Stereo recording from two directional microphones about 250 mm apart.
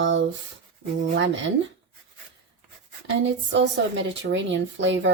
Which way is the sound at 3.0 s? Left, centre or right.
Right.